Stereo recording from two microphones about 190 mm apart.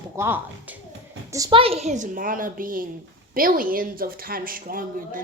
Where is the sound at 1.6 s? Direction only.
30° right (ahead or behind).